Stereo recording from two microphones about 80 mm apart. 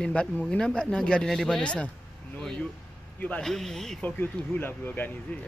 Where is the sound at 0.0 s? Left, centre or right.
Centre.